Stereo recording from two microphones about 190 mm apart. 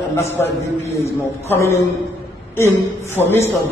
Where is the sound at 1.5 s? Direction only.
15° left (ahead or behind).